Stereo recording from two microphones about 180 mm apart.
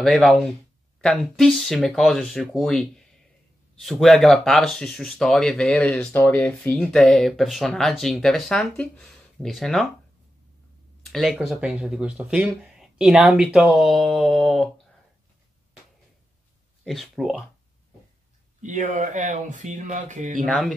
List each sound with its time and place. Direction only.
0.0 s speech: 5° left (ahead or behind)
11.1 s speech: centre (ahead or behind)
16.8 s speech: centre (ahead or behind)
18.6 s speech: 40° right (ahead or behind)
20.4 s speech: centre (ahead or behind)